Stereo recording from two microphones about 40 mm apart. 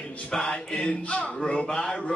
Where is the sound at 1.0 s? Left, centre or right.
Left.